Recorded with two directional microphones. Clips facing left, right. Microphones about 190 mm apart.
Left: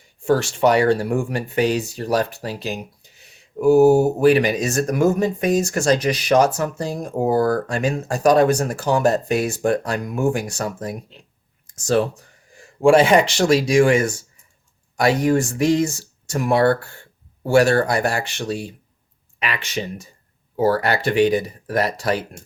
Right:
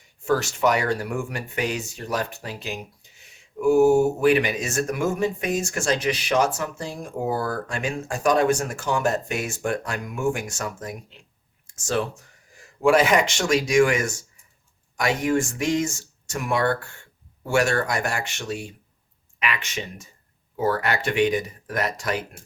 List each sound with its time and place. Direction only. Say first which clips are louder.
0.3 s speech: left 5 dB; 30° left (ahead or behind)